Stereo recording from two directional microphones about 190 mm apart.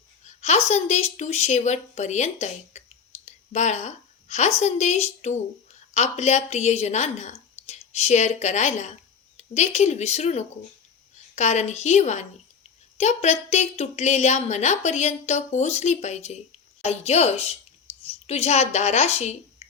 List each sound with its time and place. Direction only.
0.7 s a woman's voice: 35° left (ahead or behind)
3.2 s whispering: 35° left (ahead or behind)
4.6 s a woman's voice: 35° left (ahead or behind)